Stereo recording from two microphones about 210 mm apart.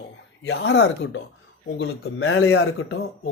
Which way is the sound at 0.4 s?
60° left (ahead or behind).